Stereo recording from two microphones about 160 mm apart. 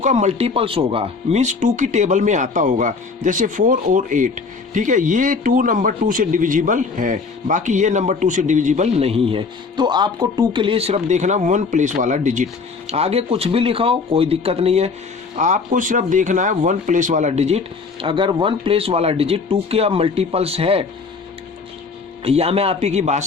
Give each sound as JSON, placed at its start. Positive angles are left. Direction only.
{"t": 0.0, "sound": "speech", "side_deg": -45}
{"t": 12.9, "sound": "speech", "side_deg": -40}
{"t": 15.4, "sound": "speech", "side_deg": -50}
{"t": 18.0, "sound": "speech", "side_deg": -30}
{"t": 22.2, "sound": "speech", "side_deg": -40}